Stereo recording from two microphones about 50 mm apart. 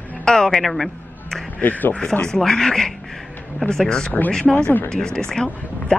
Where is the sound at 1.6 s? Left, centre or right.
Left.